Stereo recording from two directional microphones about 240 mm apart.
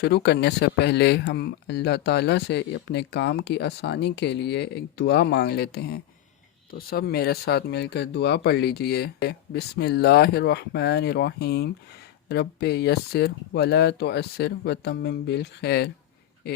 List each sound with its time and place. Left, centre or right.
0.0 s speech: left